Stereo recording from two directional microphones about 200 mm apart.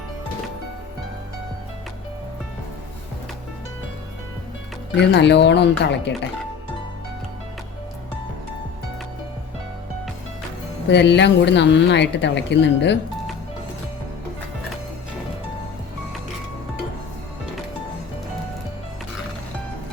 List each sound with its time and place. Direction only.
4.9 s speech: 60° left (ahead or behind)
10.8 s speech: 60° left (ahead or behind)